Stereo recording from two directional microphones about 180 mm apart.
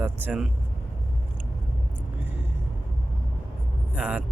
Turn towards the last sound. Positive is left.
turn(degrees=-5)  # may be behind; listen again after turning